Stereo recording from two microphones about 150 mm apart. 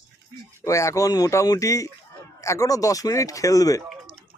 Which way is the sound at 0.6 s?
20° left (ahead or behind).